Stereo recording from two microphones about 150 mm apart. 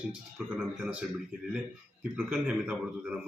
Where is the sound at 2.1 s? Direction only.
10° right (ahead or behind).